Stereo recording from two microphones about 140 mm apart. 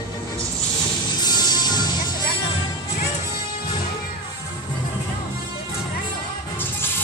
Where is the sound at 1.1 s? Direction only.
30° left (ahead or behind).